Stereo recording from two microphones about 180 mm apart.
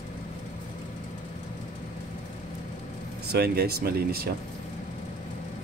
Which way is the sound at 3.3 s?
60° right (ahead or behind).